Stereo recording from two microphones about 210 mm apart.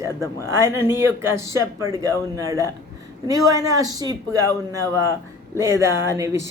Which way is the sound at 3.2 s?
15° right (ahead or behind).